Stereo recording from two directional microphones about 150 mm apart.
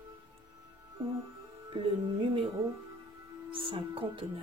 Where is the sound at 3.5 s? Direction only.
35° right (ahead or behind).